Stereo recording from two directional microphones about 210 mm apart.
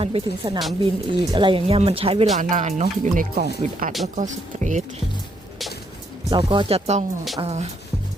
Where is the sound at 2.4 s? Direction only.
35° right (ahead or behind).